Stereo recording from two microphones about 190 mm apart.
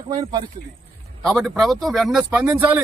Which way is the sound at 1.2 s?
Centre (ahead or behind).